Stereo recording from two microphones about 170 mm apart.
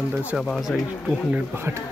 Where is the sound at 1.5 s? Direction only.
15° right (ahead or behind).